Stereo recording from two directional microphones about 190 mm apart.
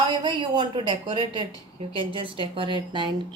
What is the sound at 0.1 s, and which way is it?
A woman's voice, 25° right (ahead or behind).